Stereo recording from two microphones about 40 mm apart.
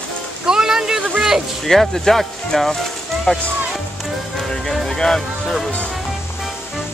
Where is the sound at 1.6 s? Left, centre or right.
Centre.